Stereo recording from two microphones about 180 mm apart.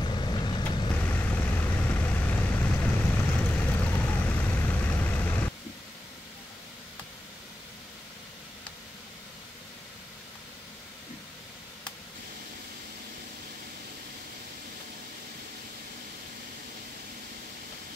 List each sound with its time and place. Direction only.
0.0 s vehicle: 25° left (ahead or behind)
0.9 s vehicle: 10° left (ahead or behind)